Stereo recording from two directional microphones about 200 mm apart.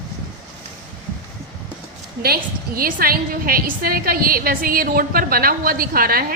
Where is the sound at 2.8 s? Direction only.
45° right (ahead or behind).